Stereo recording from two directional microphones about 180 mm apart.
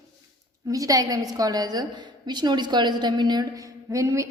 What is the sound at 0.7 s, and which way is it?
A woman's voice, 20° right (ahead or behind).